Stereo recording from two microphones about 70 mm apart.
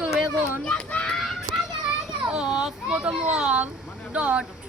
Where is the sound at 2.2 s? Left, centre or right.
Centre.